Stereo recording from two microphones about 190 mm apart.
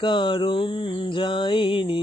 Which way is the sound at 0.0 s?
25° left (ahead or behind).